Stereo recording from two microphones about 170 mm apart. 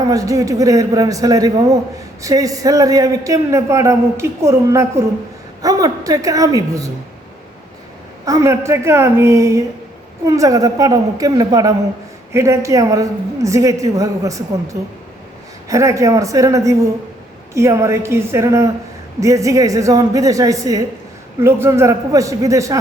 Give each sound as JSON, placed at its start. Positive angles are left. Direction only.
{"t": 0.1, "sound": "a man's voice", "side_deg": -20}
{"t": 8.2, "sound": "a woman's voice", "side_deg": -20}